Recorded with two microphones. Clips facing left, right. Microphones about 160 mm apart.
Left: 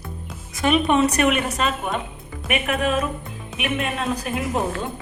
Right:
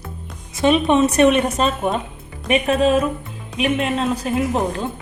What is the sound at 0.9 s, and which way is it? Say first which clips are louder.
A woman's voice: right 4 dB; 25° right (ahead or behind).